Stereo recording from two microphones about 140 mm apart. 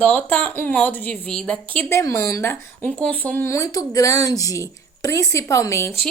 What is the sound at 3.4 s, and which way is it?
A woman's voice, 25° left (ahead or behind).